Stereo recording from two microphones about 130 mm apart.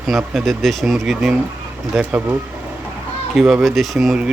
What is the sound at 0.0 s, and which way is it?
Speech, centre (ahead or behind).